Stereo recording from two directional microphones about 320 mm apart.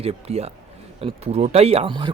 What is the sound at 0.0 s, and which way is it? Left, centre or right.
Speech, centre.